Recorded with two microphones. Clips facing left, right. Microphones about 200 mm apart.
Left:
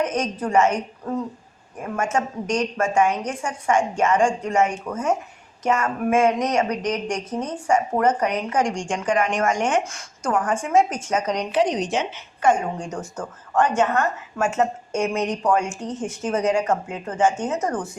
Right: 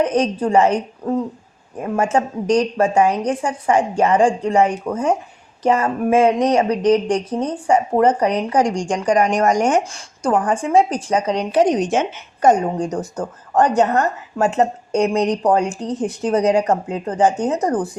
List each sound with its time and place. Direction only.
0.0 s a woman's voice: 30° right (ahead or behind)
11.5 s a woman's voice: 50° right (ahead or behind)